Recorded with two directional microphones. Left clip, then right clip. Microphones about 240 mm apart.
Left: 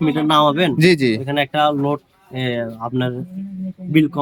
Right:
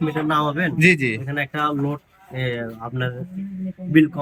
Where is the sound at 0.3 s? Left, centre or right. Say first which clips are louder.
Left 7 dB; left.